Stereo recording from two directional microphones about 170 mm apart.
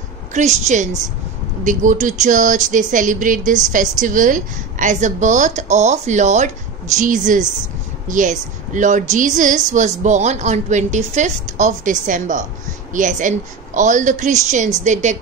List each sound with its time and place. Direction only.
0.3 s speech: 45° right (ahead or behind)